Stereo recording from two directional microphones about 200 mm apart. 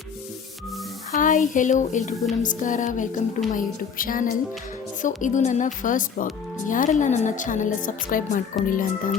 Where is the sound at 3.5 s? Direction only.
45° left (ahead or behind).